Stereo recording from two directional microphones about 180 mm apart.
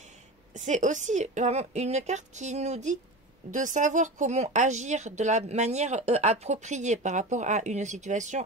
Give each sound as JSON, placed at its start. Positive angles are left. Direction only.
{"t": 0.0, "sound": "a woman's voice", "side_deg": -45}